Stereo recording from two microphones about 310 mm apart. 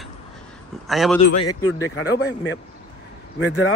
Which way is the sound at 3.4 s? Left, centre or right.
Left.